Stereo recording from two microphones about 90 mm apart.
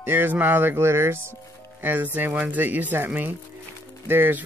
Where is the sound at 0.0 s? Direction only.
25° right (ahead or behind).